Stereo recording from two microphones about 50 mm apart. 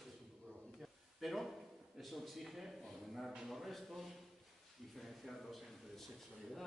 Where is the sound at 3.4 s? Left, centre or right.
Centre.